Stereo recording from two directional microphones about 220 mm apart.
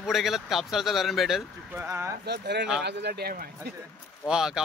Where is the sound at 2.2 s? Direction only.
50° right (ahead or behind).